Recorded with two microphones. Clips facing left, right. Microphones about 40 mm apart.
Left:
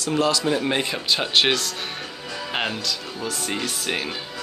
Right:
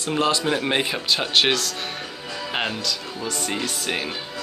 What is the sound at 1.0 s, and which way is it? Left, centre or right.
Speech, centre.